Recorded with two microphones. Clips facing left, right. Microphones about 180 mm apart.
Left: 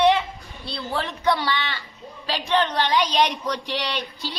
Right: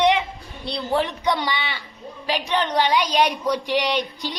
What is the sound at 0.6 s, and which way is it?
A woman's voice, 15° right (ahead or behind).